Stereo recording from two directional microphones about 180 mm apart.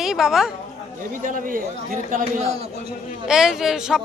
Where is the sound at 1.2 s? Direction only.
50° right (ahead or behind).